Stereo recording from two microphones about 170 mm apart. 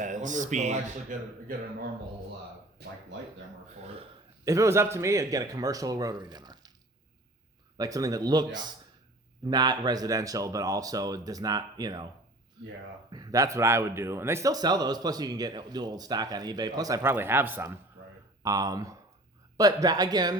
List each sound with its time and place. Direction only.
0.0 s speech: 45° right (ahead or behind)
2.8 s speech: 70° right (ahead or behind)
3.8 s a man's voice: 35° right (ahead or behind)
4.4 s speech: 20° right (ahead or behind)
7.8 s speech: 20° right (ahead or behind)